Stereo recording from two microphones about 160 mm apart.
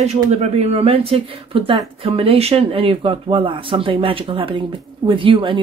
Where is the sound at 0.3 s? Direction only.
40° right (ahead or behind).